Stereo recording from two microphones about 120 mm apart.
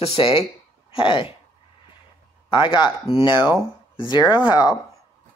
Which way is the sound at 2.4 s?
45° left (ahead or behind).